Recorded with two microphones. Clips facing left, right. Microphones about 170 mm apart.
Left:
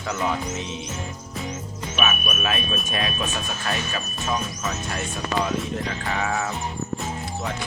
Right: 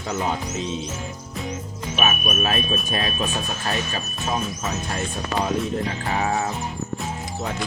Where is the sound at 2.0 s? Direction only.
35° right (ahead or behind).